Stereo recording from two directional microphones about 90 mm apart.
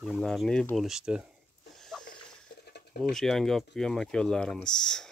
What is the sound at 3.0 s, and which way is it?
Speech, 5° left (ahead or behind).